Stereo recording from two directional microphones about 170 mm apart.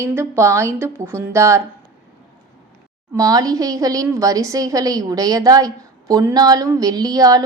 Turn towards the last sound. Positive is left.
turn(degrees=-20)  # may be behind; listen again after turning